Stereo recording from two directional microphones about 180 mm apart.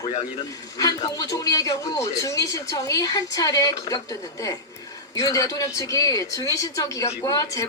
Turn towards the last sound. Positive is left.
turn(degrees=20)  # may be behind; listen again after turning